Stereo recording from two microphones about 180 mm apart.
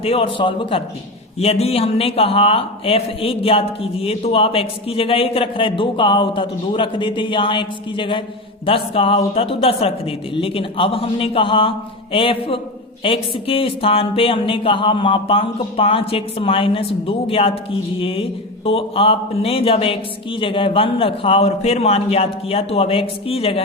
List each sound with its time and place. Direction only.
0.0 s a man's voice: 30° left (ahead or behind)